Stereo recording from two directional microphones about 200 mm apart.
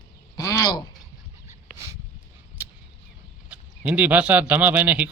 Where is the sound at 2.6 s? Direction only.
10° right (ahead or behind).